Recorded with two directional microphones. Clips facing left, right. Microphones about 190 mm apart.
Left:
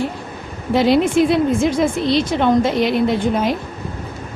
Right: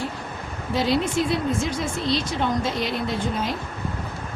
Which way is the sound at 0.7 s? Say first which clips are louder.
Left 8 dB; 65° left (ahead or behind).